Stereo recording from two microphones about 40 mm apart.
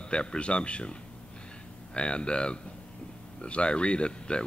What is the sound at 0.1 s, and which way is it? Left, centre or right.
Speech, left.